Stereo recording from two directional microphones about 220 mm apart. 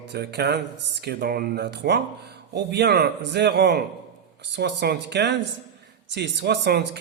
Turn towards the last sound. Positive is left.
turn(degrees=-50)  # may be behind; listen again after turning